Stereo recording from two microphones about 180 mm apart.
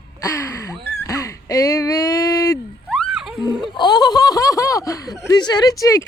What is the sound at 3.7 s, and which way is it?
Speech, 25° left (ahead or behind).